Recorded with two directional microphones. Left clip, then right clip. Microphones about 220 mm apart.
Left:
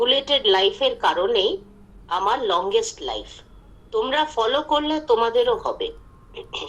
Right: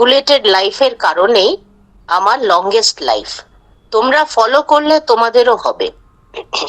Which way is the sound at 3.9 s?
55° right (ahead or behind).